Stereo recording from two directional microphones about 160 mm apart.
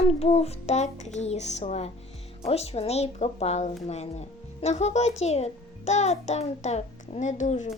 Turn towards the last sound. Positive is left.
turn(degrees=50)  # may be behind; listen again after turning